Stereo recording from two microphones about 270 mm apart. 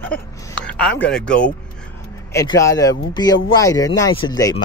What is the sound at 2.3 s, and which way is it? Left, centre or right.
Speech, centre.